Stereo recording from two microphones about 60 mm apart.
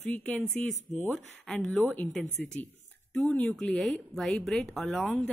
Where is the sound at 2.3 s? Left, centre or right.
Left.